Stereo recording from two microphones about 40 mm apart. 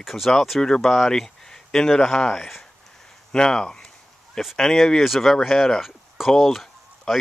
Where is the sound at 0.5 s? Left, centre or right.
Centre.